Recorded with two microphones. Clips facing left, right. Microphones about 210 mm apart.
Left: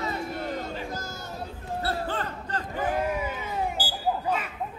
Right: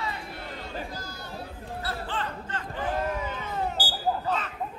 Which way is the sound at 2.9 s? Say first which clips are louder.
Left 2 dB; 10° left (ahead or behind).